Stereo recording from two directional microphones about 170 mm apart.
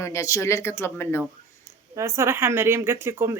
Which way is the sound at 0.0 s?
20° left (ahead or behind).